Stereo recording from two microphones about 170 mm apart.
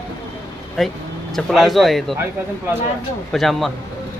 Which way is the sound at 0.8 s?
Centre (ahead or behind).